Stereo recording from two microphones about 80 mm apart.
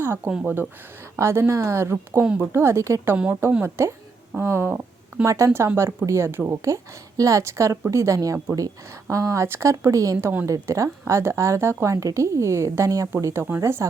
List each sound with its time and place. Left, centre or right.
0.4 s speech: right
1.2 s a woman's voice: right